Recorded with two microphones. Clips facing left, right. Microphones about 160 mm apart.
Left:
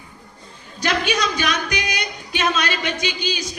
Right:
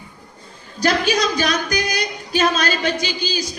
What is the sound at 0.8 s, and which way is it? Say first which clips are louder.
A man's voice: right 3 dB; 35° right (ahead or behind).